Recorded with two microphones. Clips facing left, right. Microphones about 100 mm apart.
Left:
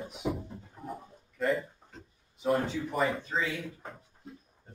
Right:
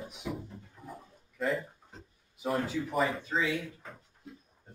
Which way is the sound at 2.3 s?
5° right (ahead or behind).